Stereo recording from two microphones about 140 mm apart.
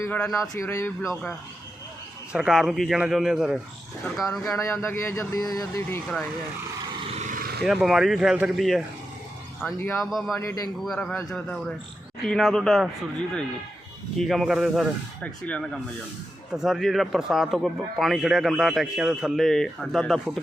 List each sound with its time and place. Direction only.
0.0 s speech: 10° left (ahead or behind)
0.3 s speech: 20° left (ahead or behind)
2.3 s speech: 5° right (ahead or behind)
4.3 s speech: 20° left (ahead or behind)
7.1 s vehicle: 55° right (ahead or behind)
7.6 s speech: centre (ahead or behind)
10.3 s speech: 20° left (ahead or behind)
10.8 s speech: centre (ahead or behind)
14.2 s speech: centre (ahead or behind)
15.2 s speech: 10° left (ahead or behind)
16.6 s speech: centre (ahead or behind)